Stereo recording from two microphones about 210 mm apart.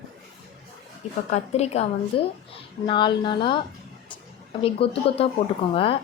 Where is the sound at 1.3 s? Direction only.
30° left (ahead or behind).